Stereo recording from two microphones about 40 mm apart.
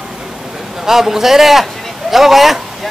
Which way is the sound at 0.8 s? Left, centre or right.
Centre.